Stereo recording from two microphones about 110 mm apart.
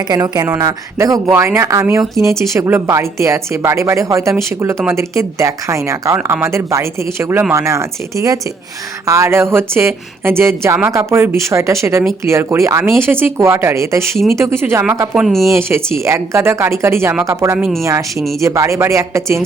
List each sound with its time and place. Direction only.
0.1 s a woman's voice: 35° right (ahead or behind)